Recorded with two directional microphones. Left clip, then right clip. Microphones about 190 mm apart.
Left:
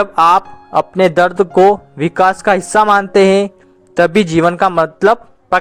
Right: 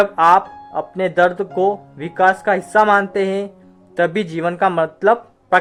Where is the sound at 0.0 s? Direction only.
30° left (ahead or behind).